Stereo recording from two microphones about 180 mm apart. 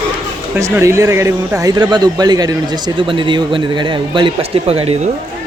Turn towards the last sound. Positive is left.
turn(degrees=-35)  # may be behind; listen again after turning